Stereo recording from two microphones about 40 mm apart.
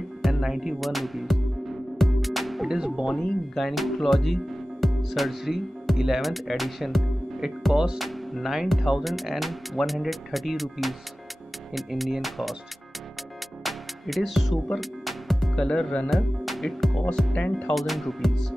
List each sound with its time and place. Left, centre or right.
0.2 s music: centre
3.1 s speech: centre
7.7 s music: centre
8.0 s speech: centre
13.7 s music: centre
15.5 s speech: centre
16.1 s speech: centre
17.3 s speech: left
17.7 s speech: centre